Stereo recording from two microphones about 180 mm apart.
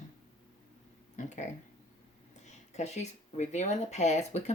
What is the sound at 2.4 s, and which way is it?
Speech, 40° left (ahead or behind).